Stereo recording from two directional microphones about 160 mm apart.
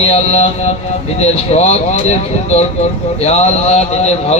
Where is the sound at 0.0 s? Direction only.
40° left (ahead or behind).